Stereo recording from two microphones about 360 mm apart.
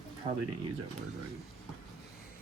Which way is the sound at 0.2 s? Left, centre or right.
Right.